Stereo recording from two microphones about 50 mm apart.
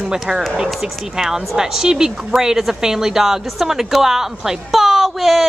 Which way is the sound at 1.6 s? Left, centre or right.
Centre.